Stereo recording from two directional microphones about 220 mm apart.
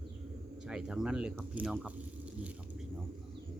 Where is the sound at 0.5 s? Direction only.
5° right (ahead or behind).